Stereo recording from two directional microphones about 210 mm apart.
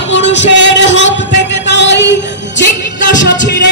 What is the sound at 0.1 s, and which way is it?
Music, 55° left (ahead or behind).